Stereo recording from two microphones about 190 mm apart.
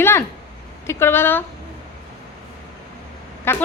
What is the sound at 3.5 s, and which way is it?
Speech, 10° left (ahead or behind).